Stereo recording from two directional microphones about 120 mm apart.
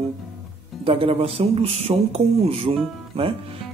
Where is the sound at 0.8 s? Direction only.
50° right (ahead or behind).